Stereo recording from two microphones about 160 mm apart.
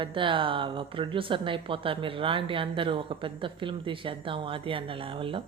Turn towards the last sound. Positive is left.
turn(degrees=-35)  # may be behind; listen again after turning